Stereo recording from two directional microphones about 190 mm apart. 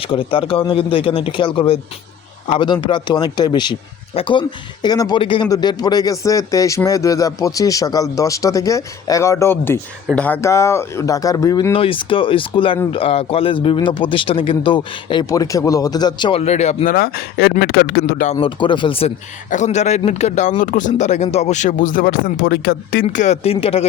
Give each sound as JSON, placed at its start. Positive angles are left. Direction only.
{"t": 0.0, "sound": "speech", "side_deg": 30}
{"t": 16.9, "sound": "speech", "side_deg": 55}
{"t": 18.3, "sound": "a man's voice", "side_deg": 25}
{"t": 23.0, "sound": "a man's voice", "side_deg": 40}